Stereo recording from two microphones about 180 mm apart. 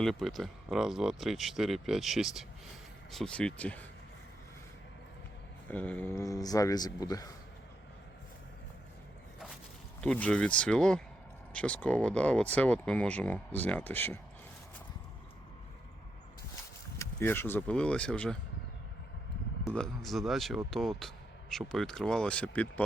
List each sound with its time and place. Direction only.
0.0 s speech: centre (ahead or behind)
5.6 s speech: 10° left (ahead or behind)
10.0 s speech: 5° left (ahead or behind)
17.0 s speech: 15° left (ahead or behind)
19.6 s speech: 5° left (ahead or behind)